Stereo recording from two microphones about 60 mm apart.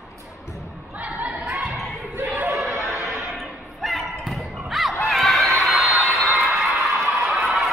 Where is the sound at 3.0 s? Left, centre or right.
Right.